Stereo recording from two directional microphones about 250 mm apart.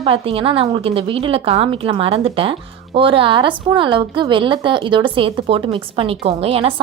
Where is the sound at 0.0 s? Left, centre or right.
Right.